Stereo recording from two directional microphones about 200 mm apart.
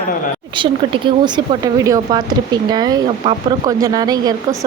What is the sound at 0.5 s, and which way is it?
Speech, 25° right (ahead or behind).